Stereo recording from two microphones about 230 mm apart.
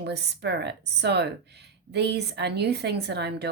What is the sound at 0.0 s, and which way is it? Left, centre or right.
A woman's voice, right.